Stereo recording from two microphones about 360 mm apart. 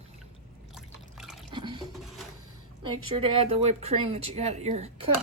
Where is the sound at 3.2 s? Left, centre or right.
Centre.